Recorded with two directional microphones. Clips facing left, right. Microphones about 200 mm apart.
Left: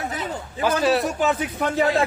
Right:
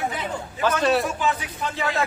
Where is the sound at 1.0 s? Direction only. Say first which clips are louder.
Left 3 dB; 45° left (ahead or behind).